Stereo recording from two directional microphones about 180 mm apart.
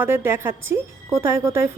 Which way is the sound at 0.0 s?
10° right (ahead or behind).